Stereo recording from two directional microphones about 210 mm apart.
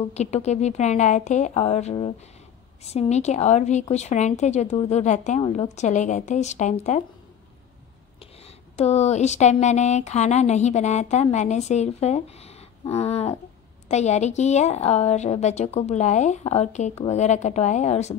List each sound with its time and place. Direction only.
0.0 s speech: 30° left (ahead or behind)
8.7 s speech: 30° left (ahead or behind)